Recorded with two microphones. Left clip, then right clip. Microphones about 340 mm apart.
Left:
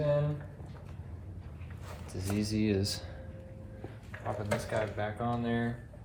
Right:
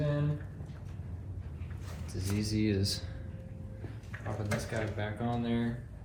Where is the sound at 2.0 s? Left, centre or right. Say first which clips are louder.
Left 2 dB; centre.